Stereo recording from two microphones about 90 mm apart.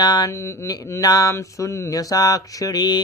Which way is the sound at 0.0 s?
50° left (ahead or behind).